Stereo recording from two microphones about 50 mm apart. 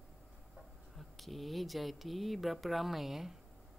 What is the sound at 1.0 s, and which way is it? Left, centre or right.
Speech, centre.